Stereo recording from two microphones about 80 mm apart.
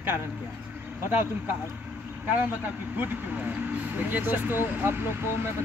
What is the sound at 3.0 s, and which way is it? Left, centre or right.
Speech, right.